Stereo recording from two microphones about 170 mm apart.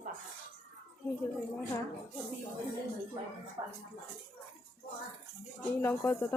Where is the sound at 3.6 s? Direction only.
25° right (ahead or behind).